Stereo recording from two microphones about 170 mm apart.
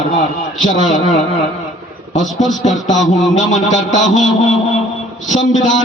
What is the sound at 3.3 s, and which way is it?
A man's voice, 45° left (ahead or behind).